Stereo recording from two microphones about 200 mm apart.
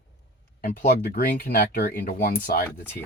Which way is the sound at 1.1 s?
50° left (ahead or behind).